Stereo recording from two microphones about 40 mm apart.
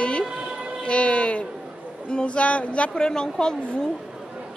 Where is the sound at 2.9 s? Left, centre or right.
Centre.